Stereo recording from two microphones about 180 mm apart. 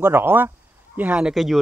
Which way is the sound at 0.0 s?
10° right (ahead or behind).